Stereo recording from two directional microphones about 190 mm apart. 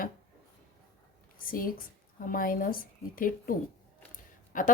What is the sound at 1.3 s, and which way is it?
Speech, 50° left (ahead or behind).